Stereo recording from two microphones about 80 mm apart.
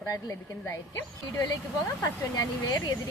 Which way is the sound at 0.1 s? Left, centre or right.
Left.